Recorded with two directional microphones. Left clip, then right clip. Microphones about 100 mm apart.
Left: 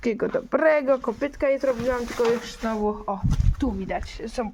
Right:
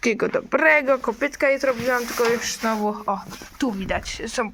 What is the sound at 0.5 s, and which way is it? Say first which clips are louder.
Speech: right 2 dB; 35° left (ahead or behind).